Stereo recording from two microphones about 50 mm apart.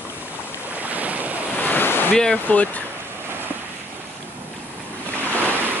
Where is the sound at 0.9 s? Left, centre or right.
Right.